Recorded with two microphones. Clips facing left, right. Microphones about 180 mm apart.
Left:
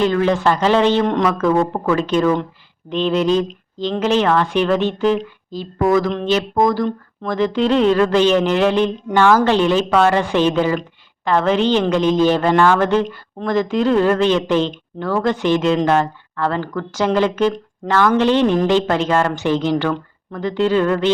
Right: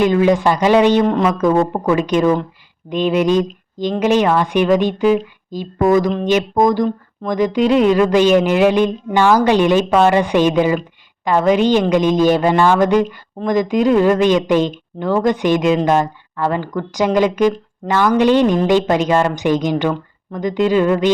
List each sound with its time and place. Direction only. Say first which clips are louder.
0.0 s a woman's voice: right 3 dB; 15° right (ahead or behind)
1.3 s a woman's voice: right 2 dB; 15° right (ahead or behind)